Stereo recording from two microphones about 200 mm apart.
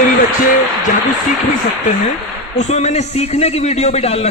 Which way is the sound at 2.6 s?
35° left (ahead or behind).